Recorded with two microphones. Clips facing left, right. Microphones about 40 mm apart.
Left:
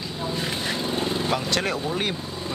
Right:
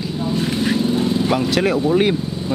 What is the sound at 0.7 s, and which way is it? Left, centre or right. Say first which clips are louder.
Vehicle: right 8 dB; left.